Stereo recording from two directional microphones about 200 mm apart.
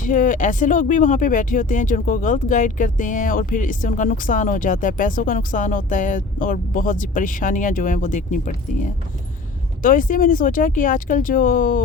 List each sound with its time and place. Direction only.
0.0 s speech: 40° left (ahead or behind)